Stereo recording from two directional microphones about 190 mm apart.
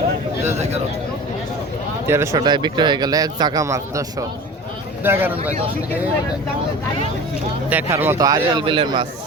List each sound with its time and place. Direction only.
2.0 s speech: 15° right (ahead or behind)
5.0 s speech: 10° right (ahead or behind)
7.7 s speech: 10° right (ahead or behind); by 9.0 s 25° right (ahead or behind)